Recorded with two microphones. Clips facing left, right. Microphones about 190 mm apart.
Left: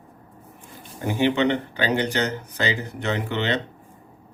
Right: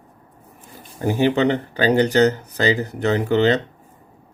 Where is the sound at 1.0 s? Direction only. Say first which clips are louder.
Right 3 dB; 40° right (ahead or behind).